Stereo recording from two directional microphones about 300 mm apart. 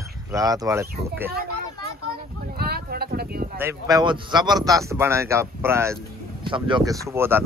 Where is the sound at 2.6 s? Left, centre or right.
Right.